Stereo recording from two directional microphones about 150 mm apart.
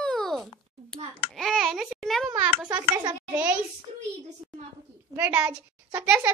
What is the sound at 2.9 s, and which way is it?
Speech, 30° right (ahead or behind).